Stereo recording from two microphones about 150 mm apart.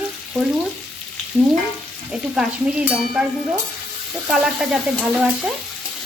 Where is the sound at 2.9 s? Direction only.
5° right (ahead or behind).